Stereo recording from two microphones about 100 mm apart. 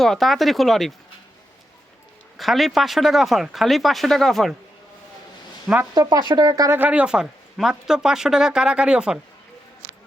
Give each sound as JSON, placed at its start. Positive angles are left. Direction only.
{"t": 0.0, "sound": "speech", "side_deg": 0}
{"t": 2.4, "sound": "speech", "side_deg": 0}
{"t": 5.9, "sound": "speech", "side_deg": -40}
{"t": 6.7, "sound": "speech", "side_deg": -15}